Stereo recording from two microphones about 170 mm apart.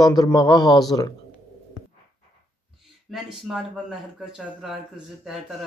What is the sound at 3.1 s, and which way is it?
Speech, centre (ahead or behind).